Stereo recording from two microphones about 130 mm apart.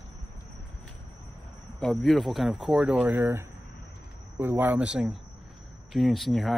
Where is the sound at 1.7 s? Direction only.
5° left (ahead or behind).